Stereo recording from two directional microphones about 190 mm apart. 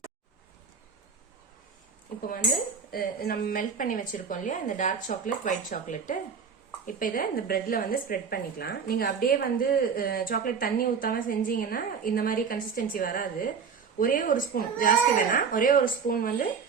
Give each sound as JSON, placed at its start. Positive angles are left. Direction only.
{"t": 2.9, "sound": "speech", "side_deg": 50}